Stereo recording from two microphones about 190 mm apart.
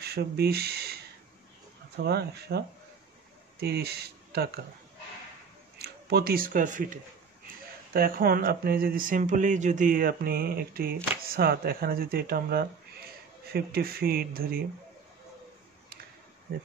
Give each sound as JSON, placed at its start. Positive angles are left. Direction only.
{"t": 0.0, "sound": "speech", "side_deg": -55}
{"t": 2.0, "sound": "speech", "side_deg": -60}
{"t": 5.8, "sound": "speech", "side_deg": -55}